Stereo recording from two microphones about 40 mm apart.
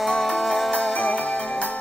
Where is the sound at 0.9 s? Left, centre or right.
Left.